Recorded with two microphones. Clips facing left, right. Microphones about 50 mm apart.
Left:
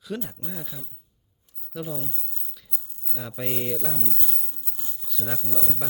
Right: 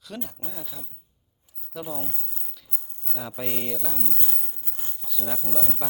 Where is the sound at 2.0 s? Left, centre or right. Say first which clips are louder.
Right 1 dB; right.